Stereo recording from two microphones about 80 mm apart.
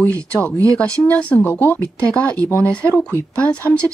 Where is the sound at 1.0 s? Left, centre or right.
Centre.